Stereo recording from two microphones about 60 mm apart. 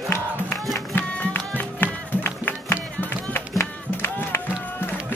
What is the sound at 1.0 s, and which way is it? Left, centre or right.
Music, left.